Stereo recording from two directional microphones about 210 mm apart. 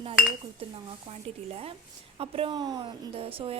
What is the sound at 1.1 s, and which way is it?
A woman's voice, 30° right (ahead or behind).